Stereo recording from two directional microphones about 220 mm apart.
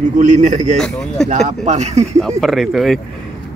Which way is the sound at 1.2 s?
30° right (ahead or behind).